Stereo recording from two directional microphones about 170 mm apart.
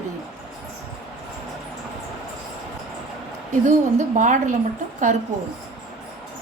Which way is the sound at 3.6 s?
45° right (ahead or behind).